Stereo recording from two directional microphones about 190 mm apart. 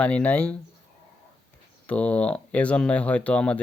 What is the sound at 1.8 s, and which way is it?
Speech, 5° left (ahead or behind).